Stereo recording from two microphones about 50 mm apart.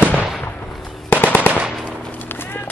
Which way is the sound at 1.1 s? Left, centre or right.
Left.